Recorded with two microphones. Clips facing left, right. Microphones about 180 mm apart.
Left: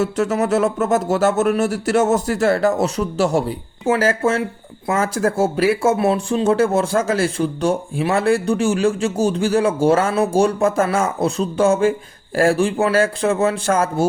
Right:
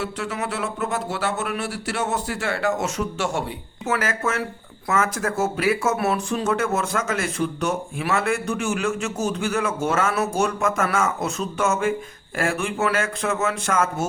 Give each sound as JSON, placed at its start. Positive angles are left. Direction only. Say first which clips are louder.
{"t": 0.0, "sound": "speech", "louder": "left 9 dB", "side_deg": 45}